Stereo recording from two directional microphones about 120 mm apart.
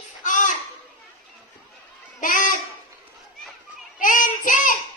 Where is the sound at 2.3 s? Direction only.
90° left.